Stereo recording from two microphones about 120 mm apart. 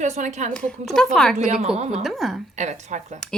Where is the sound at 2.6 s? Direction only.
75° right (ahead or behind).